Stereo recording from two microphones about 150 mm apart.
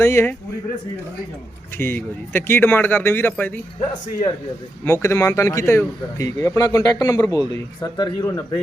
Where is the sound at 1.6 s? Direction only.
15° left (ahead or behind).